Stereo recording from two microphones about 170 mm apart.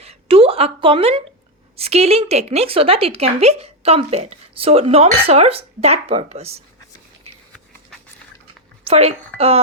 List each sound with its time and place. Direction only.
0.0 s a sound: 35° right (ahead or behind)
1.7 s a woman's voice: 35° right (ahead or behind)
8.8 s a woman's voice: 35° right (ahead or behind)